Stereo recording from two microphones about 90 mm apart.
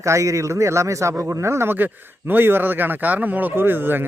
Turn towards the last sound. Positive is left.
turn(degrees=-20)  # may be behind; listen again after turning